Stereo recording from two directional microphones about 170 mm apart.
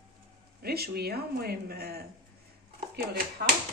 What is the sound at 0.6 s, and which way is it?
Speech, 65° right (ahead or behind).